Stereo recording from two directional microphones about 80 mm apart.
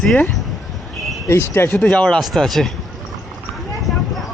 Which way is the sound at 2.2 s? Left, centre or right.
Centre.